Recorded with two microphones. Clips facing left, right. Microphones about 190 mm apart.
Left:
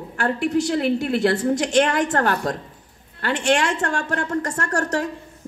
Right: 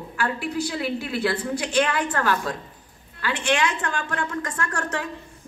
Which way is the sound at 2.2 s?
60° left (ahead or behind).